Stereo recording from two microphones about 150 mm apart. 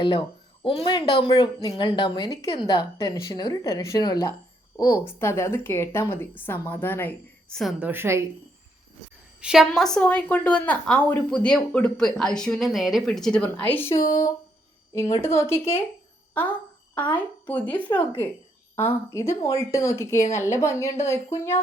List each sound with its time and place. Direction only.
0.0 s a woman's voice: 35° left (ahead or behind); by 7.6 s 15° left (ahead or behind)
7.6 s a woman's voice: centre (ahead or behind)
7.9 s a woman's voice: 15° right (ahead or behind)
9.4 s a woman's voice: 5° right (ahead or behind); by 15.8 s 15° left (ahead or behind)
16.3 s a sound: 10° left (ahead or behind)
17.2 s a woman's voice: 10° left (ahead or behind)
19.1 s a woman's voice: 20° left (ahead or behind)